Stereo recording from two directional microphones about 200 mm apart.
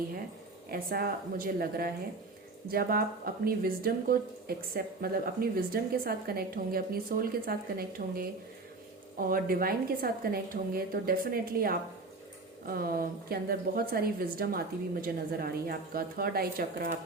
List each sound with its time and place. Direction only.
0.7 s speech: 50° right (ahead or behind)